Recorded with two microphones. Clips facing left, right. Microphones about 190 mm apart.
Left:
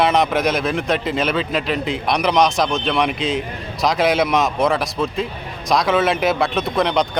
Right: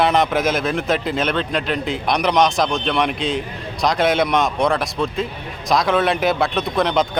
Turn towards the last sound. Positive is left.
turn(degrees=0)  # may be behind; listen again after turning